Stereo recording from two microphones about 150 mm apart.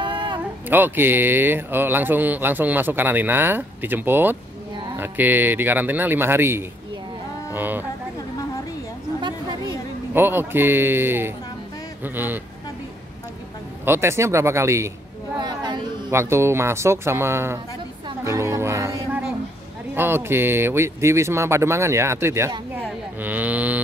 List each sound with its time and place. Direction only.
0.0 s a sound: 30° right (ahead or behind)
0.7 s speech: 15° right (ahead or behind)
10.1 s speech: 15° right (ahead or behind)
13.8 s speech: 15° right (ahead or behind)
15.3 s a sound: 30° right (ahead or behind)
16.1 s speech: 15° right (ahead or behind)
23.2 s cattle: 10° right (ahead or behind)